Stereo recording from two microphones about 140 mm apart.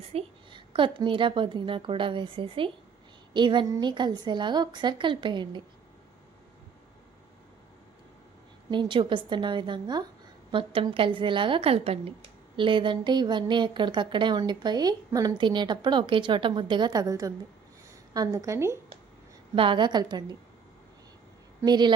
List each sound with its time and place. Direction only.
0.0 s a woman's voice: 45° right (ahead or behind)
8.7 s a woman's voice: 35° right (ahead or behind); by 18.8 s 20° right (ahead or behind)
19.5 s a woman's voice: 35° right (ahead or behind)
21.6 s a woman's voice: 30° right (ahead or behind)